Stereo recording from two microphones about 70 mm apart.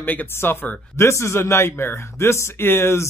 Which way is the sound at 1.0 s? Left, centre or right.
Left.